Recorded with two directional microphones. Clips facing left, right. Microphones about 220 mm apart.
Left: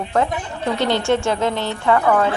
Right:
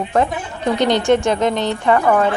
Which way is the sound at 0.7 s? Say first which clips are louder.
Right 4 dB; 15° right (ahead or behind).